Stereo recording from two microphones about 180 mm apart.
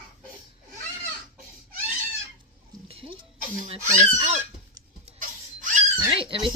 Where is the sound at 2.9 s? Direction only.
30° right (ahead or behind).